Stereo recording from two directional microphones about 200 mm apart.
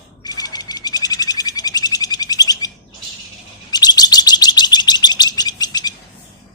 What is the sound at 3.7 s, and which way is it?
Chirp, 20° left (ahead or behind).